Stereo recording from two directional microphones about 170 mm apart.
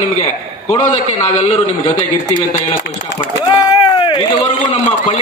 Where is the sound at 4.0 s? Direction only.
30° left (ahead or behind).